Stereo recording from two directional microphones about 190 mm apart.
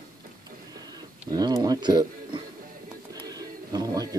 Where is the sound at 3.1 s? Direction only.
20° right (ahead or behind).